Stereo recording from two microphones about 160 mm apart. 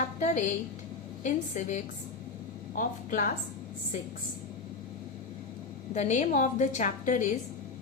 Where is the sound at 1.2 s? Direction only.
50° left (ahead or behind).